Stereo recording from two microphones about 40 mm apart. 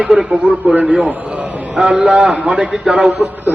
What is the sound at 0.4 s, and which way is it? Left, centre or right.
A man's voice, right.